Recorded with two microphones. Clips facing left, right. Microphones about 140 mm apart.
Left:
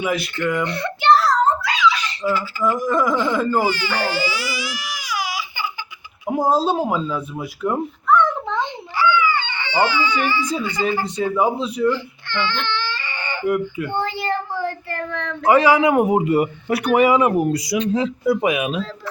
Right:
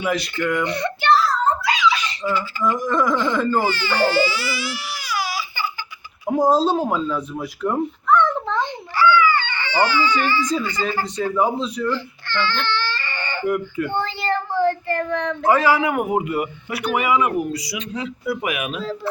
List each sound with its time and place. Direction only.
0.0 s speech: 5° left (ahead or behind)
1.2 s a sound: 75° left (ahead or behind)
2.2 s speech: 5° left (ahead or behind)
6.3 s speech: 5° left (ahead or behind)
6.7 s cat: 5° left (ahead or behind)
11.2 s baby cry: 10° left (ahead or behind)
15.4 s speech: 15° left (ahead or behind)
16.3 s speech: 35° left (ahead or behind)
17.5 s speech: 50° left (ahead or behind)
17.9 s speech: 30° left (ahead or behind)